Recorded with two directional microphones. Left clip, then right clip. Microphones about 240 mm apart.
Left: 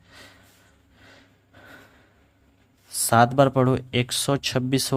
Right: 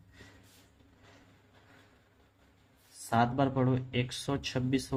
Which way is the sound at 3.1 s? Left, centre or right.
Left.